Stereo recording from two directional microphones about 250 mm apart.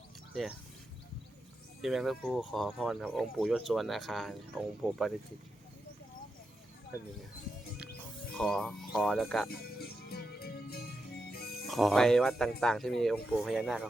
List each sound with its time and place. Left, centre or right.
1.8 s speech: centre
8.4 s speech: centre
9.5 s music: left
11.6 s speech: centre